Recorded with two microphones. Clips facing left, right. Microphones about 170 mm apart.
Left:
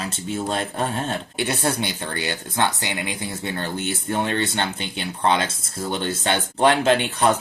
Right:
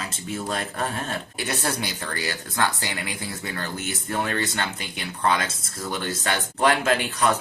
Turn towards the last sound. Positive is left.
turn(degrees=30)  # may be behind; listen again after turning